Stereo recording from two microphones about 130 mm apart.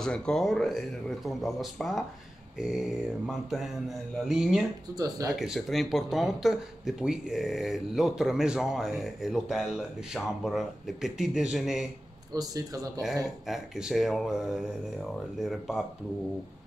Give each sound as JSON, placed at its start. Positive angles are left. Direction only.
{"t": 0.0, "sound": "speech", "side_deg": 5}
{"t": 4.9, "sound": "speech", "side_deg": -30}
{"t": 5.3, "sound": "speech", "side_deg": 0}
{"t": 12.4, "sound": "speech", "side_deg": -30}
{"t": 13.5, "sound": "speech", "side_deg": -5}